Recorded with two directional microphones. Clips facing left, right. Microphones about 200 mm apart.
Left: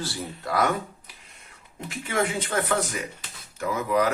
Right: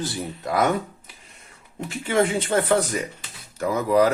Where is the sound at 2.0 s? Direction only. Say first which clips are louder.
Right 5 dB; 30° right (ahead or behind).